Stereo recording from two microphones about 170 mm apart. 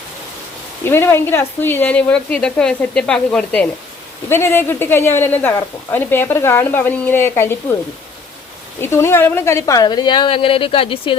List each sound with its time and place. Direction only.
0.9 s speech: 15° left (ahead or behind)
8.8 s a woman's voice: 15° left (ahead or behind); by 11.2 s 30° left (ahead or behind)